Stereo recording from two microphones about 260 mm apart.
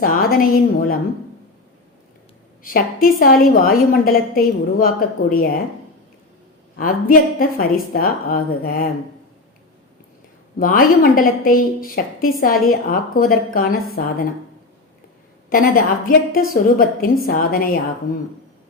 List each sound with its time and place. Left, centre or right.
0.0 s a woman's voice: left
2.6 s a woman's voice: left
6.7 s a woman's voice: left
10.6 s a woman's voice: left
15.4 s a woman's voice: left